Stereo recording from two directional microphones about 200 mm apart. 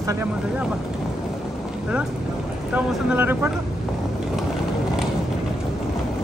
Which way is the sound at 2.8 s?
10° right (ahead or behind).